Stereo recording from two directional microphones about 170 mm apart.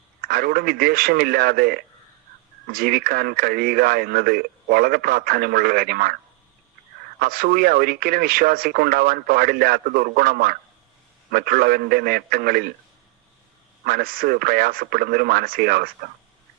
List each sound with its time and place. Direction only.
0.2 s speech: 60° right (ahead or behind)
7.2 s speech: 60° right (ahead or behind)
13.8 s speech: 60° right (ahead or behind)